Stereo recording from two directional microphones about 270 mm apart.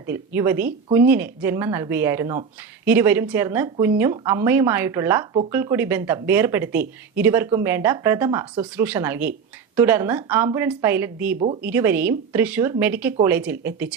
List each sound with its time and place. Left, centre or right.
0.1 s speech: centre